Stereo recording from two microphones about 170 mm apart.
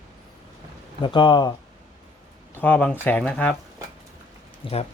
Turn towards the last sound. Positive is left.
turn(degrees=30)  # may be behind; listen again after turning